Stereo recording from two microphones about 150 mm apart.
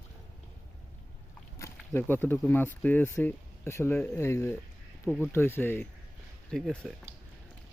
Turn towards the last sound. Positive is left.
turn(degrees=5)  # may be behind; listen again after turning